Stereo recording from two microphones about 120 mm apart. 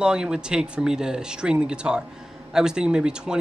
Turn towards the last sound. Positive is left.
turn(degrees=-5)  # may be behind; listen again after turning